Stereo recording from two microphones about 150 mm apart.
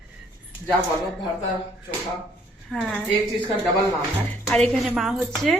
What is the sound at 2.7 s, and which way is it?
Speech, centre (ahead or behind).